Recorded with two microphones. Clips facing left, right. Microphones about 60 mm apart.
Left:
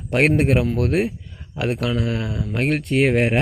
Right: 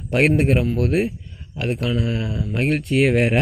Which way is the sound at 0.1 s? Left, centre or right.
Left.